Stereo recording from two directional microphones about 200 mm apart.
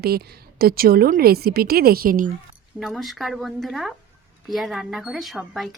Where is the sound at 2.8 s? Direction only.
Centre (ahead or behind).